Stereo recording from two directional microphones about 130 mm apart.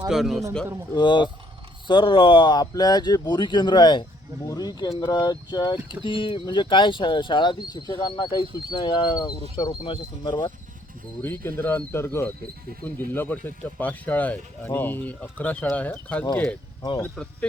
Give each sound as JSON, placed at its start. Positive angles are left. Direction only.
{"t": 0.1, "sound": "a man's voice", "side_deg": 0}
{"t": 0.9, "sound": "speech", "side_deg": 35}
{"t": 11.2, "sound": "a man's voice", "side_deg": 15}